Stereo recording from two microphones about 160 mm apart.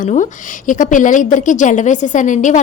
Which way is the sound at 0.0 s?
50° left (ahead or behind).